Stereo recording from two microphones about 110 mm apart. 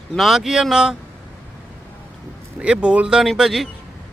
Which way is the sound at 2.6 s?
10° right (ahead or behind).